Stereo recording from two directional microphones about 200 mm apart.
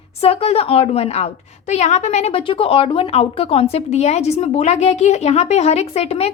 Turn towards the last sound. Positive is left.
turn(degrees=30)  # may be behind; listen again after turning